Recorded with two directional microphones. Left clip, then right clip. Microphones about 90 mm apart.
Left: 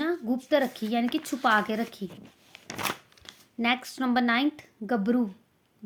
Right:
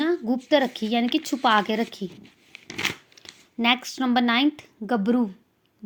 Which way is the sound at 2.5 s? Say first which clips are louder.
Right 6 dB; 60° left (ahead or behind).